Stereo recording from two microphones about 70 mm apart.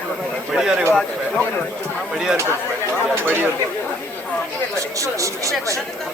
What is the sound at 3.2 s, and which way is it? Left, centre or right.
Speech, right.